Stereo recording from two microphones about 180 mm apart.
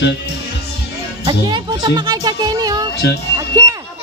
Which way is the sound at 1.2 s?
20° right (ahead or behind).